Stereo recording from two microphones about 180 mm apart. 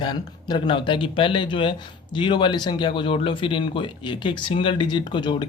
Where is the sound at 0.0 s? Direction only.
25° left (ahead or behind).